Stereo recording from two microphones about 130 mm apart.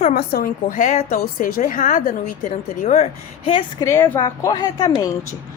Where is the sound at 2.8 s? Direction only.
60° left (ahead or behind).